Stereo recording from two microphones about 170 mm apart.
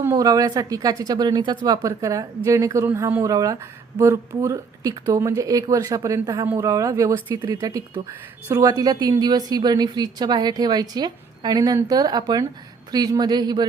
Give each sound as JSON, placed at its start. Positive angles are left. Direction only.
{"t": 0.0, "sound": "a woman's voice", "side_deg": -20}